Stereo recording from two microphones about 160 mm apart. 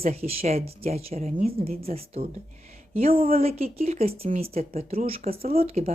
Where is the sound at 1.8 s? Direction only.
40° right (ahead or behind).